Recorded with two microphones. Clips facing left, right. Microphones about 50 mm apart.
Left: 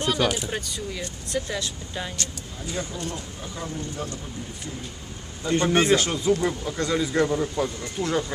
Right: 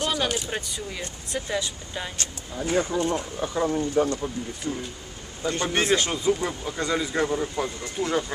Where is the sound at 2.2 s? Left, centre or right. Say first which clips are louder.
Right 3 dB; right.